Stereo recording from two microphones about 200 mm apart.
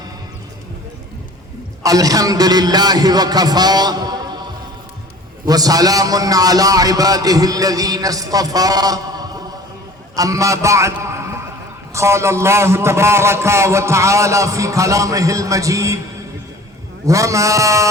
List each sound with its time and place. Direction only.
1.8 s a man's voice: 20° right (ahead or behind)
5.5 s a man's voice: 20° right (ahead or behind)
17.1 s a man's voice: 15° right (ahead or behind)